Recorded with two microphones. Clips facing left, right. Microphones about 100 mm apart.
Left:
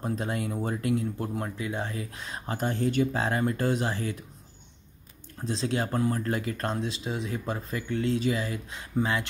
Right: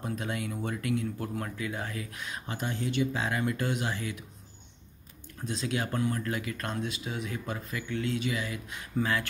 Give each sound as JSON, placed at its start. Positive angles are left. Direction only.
{"t": 0.0, "sound": "speech", "side_deg": 35}
{"t": 5.4, "sound": "speech", "side_deg": 30}